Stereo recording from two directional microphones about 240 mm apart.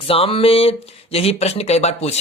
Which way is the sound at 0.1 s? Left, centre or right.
Left.